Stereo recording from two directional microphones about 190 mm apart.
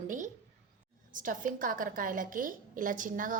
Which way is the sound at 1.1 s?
45° right (ahead or behind).